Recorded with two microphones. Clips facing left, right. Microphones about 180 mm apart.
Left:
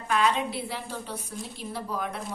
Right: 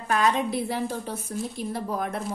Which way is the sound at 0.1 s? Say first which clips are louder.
Right 2 dB; 45° right (ahead or behind).